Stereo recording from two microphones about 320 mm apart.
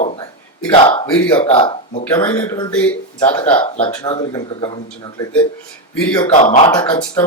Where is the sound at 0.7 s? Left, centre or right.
Centre.